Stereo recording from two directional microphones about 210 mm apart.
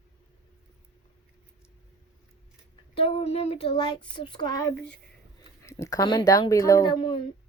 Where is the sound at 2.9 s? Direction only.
25° left (ahead or behind).